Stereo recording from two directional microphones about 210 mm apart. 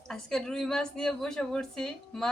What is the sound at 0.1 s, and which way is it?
A woman's voice, centre (ahead or behind).